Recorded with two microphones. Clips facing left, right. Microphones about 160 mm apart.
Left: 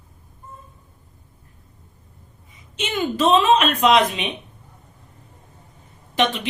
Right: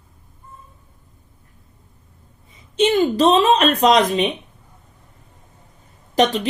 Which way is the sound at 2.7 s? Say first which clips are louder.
Right 8 dB; 35° right (ahead or behind).